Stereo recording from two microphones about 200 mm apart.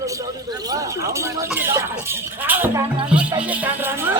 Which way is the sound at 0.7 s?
15° right (ahead or behind).